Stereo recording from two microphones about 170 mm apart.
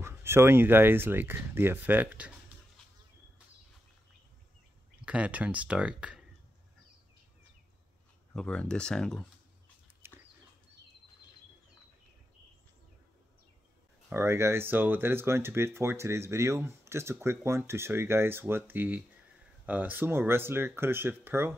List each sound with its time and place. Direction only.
0.0 s speech: 15° right (ahead or behind)
5.0 s speech: 10° right (ahead or behind)
8.3 s speech: 5° left (ahead or behind)
10.0 s a sound: 10° right (ahead or behind)
14.0 s speech: 15° right (ahead or behind)